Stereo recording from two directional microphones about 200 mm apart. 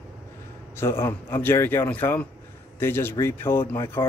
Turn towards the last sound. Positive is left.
turn(degrees=10)  # may be behind; listen again after turning